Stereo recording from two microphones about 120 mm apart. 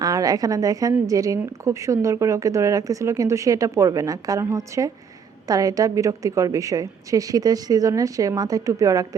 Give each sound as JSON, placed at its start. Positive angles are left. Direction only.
{"t": 0.0, "sound": "a woman's voice", "side_deg": -30}